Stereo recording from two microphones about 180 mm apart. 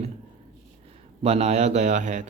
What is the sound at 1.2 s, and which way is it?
Speech, 35° right (ahead or behind).